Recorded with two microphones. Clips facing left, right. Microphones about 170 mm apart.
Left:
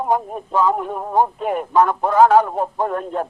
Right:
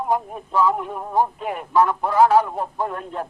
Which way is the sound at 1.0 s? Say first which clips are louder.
Left 3 dB; 25° left (ahead or behind).